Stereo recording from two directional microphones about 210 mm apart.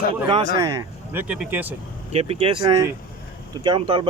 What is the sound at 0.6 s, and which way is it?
Speech, 15° right (ahead or behind).